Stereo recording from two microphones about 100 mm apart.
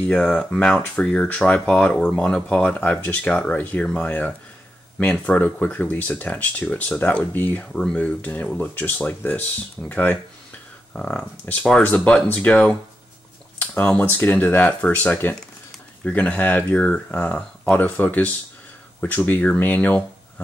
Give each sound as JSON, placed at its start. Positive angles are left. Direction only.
{"t": 0.0, "sound": "speech", "side_deg": 10}